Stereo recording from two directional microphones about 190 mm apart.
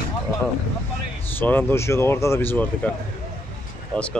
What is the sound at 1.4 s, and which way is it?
Speech, 10° left (ahead or behind).